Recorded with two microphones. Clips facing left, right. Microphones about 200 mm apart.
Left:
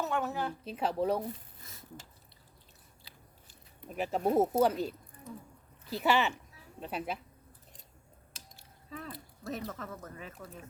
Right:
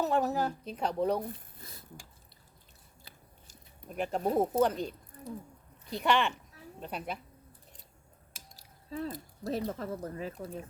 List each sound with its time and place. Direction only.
0.0 s speech: 35° right (ahead or behind)
0.6 s a woman's voice: 5° left (ahead or behind)
3.0 s biting: 45° right (ahead or behind)
3.8 s a woman's voice: 5° left (ahead or behind)
5.3 s speech: 35° right (ahead or behind)
5.9 s a woman's voice: 5° left (ahead or behind)
8.5 s cutlery: 35° right (ahead or behind)
9.1 s speech: 35° right (ahead or behind)